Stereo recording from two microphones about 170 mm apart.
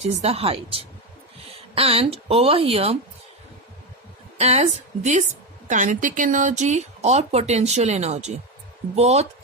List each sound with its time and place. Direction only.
0.0 s speech: 40° right (ahead or behind)
4.4 s a woman's voice: 40° right (ahead or behind)